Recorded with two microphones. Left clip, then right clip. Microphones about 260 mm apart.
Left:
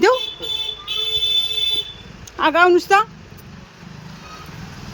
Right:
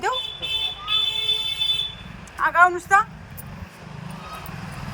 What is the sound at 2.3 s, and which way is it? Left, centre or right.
Speech, left.